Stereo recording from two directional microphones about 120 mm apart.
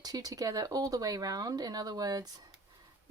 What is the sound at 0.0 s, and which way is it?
Speech, 30° right (ahead or behind).